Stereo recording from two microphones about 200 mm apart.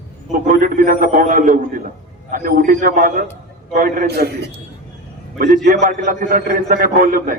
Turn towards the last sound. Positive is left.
turn(degrees=-45)  # may be behind; listen again after turning